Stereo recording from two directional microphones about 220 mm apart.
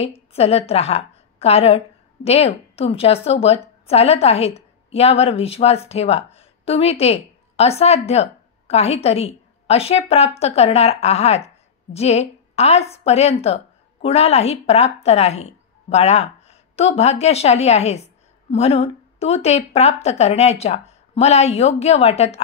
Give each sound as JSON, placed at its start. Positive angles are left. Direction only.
{"t": 0.0, "sound": "a woman's voice", "side_deg": 30}